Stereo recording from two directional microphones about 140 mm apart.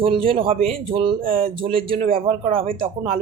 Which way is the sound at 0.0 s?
40° right (ahead or behind).